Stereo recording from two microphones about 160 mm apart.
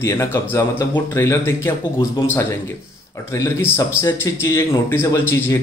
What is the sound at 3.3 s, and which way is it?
Speech, 15° left (ahead or behind).